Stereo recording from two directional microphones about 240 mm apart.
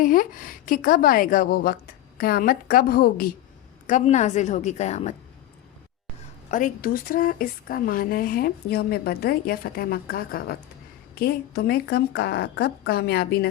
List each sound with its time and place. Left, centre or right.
0.0 s a woman's voice: left
6.5 s speech: left